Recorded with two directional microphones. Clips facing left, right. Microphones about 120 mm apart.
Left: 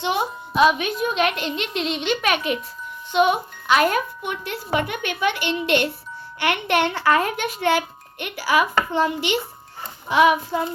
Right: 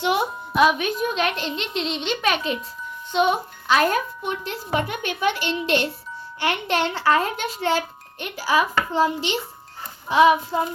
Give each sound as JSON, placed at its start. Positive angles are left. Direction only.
{"t": 0.1, "sound": "a child's voice", "side_deg": -55}
{"t": 6.7, "sound": "a woman's voice", "side_deg": 55}
{"t": 7.0, "sound": "a child's voice", "side_deg": -25}
{"t": 10.1, "sound": "a child's voice", "side_deg": -30}